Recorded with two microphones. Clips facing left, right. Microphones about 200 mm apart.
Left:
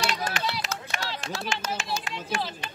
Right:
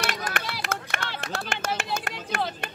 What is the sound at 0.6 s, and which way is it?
Speech, 55° right (ahead or behind).